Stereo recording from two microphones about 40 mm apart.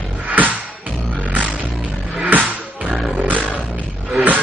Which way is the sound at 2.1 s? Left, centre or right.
Right.